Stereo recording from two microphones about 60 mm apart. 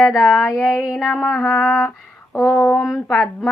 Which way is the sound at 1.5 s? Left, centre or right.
Centre.